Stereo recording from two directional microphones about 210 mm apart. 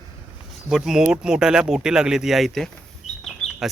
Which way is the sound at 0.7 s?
Centre (ahead or behind).